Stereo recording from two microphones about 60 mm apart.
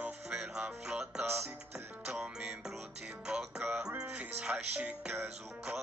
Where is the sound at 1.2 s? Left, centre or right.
Right.